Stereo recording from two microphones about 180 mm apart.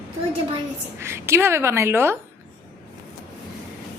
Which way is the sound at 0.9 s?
15° right (ahead or behind).